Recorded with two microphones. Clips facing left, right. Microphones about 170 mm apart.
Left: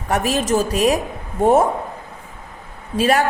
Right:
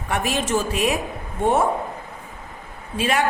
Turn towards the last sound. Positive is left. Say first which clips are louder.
# left 5 dB
turn(degrees=40)  # may be behind; listen again after turning